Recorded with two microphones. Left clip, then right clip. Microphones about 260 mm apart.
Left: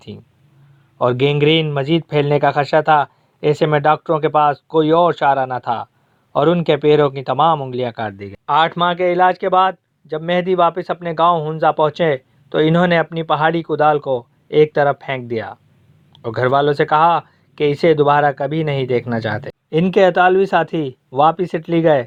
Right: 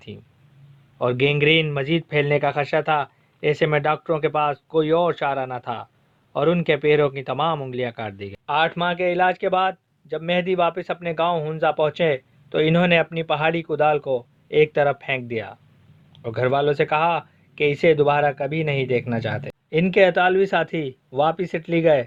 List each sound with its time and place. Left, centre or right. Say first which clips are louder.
0.9 s speech: left 5 dB; centre
9.0 s speech: left 4 dB; centre
16.2 s speech: left 5 dB; centre